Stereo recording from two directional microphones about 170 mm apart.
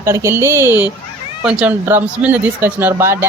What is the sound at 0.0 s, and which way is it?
Speech, 15° right (ahead or behind).